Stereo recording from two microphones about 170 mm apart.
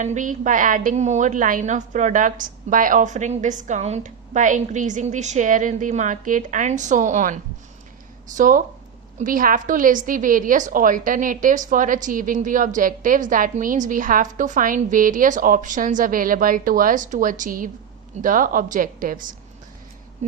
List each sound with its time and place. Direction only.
0.0 s a woman's voice: 45° right (ahead or behind)
8.4 s a woman's voice: 50° right (ahead or behind)